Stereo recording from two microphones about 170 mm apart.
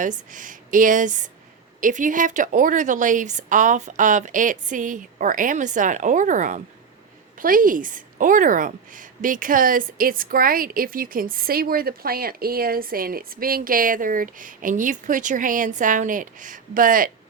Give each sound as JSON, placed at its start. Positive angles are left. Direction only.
{"t": 0.0, "sound": "a woman's voice", "side_deg": -50}